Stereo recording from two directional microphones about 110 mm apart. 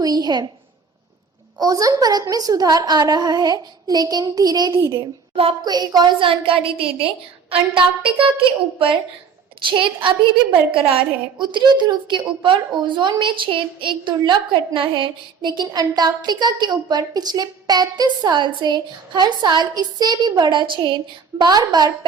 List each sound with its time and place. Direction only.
0.0 s a sound: 35° right (ahead or behind)
1.5 s a woman's voice: 35° right (ahead or behind)
4.9 s a woman's voice: 60° right (ahead or behind)
5.6 s a woman's voice: 40° right (ahead or behind)
11.3 s a woman's voice: 45° right (ahead or behind)